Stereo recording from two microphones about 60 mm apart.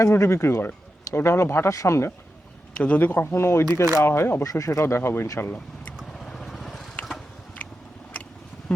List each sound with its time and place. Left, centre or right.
0.0 s speech: left
1.7 s speech: left
2.7 s speech: left
3.2 s speech: left
4.4 s speech: left
6.1 s vehicle: centre